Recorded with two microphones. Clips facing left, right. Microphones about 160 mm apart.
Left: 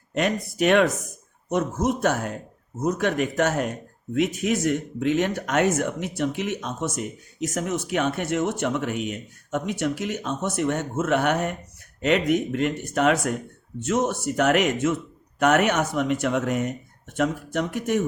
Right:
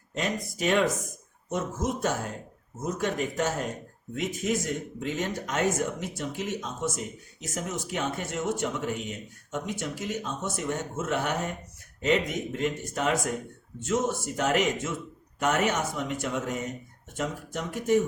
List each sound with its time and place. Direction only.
0.1 s speech: 65° left (ahead or behind)